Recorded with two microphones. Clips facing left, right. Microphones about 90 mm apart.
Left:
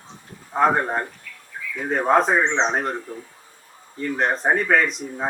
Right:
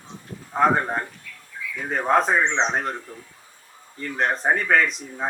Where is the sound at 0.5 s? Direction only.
5° left (ahead or behind).